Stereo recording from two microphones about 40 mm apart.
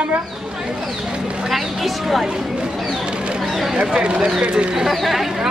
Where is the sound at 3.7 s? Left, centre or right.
Right.